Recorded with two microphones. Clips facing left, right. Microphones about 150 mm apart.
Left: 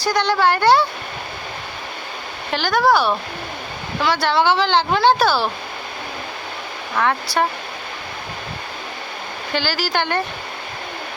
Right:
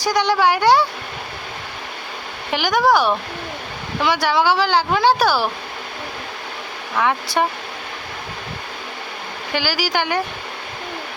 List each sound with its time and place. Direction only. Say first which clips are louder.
0.0 s speech: right 1 dB; 15° right (ahead or behind)
2.5 s speech: even; 15° right (ahead or behind)
6.9 s speech: even; 10° right (ahead or behind)
9.5 s speech: even; 10° right (ahead or behind)